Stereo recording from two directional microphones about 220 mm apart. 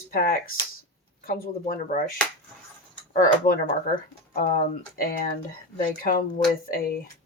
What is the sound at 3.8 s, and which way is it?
Speech, 40° left (ahead or behind).